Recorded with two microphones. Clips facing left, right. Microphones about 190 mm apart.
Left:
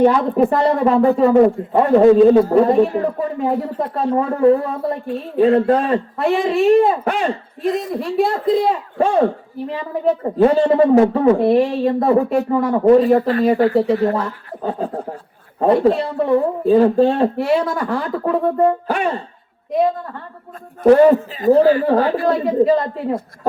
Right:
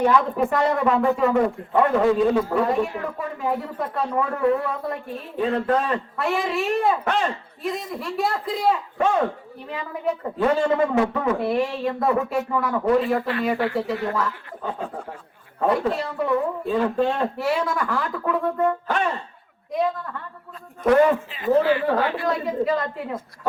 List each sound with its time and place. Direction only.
0.0 s a man's voice: 35° left (ahead or behind)
20.8 s a man's voice: 35° left (ahead or behind)